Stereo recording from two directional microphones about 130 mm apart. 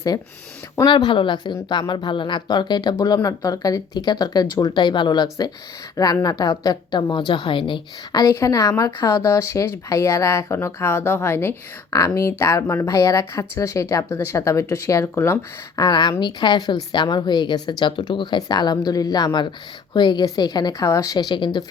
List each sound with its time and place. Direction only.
0.9 s a woman's voice: 35° left (ahead or behind)